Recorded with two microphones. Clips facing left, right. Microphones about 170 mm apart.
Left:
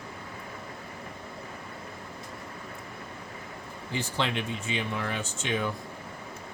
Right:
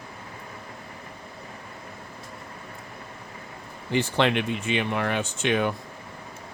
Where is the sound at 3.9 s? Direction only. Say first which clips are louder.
Right 8 dB; 65° right (ahead or behind).